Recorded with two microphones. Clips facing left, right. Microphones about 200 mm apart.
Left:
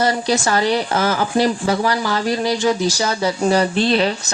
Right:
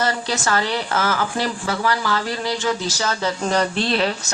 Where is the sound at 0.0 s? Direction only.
15° left (ahead or behind).